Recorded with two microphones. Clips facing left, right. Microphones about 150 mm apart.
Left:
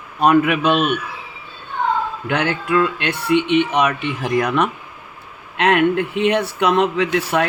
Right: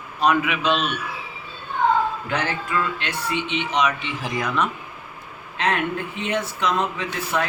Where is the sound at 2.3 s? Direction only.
65° left (ahead or behind).